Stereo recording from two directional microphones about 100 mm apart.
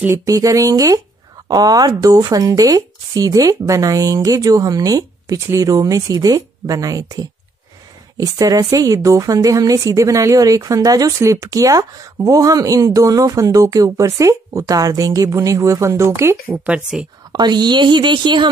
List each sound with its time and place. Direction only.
0.0 s speech: 30° right (ahead or behind)
8.2 s speech: 40° right (ahead or behind)
16.6 s speech: 10° right (ahead or behind)
17.3 s a woman's voice: 45° right (ahead or behind)